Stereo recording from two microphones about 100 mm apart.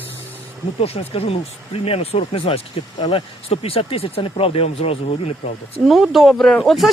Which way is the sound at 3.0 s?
60° left (ahead or behind).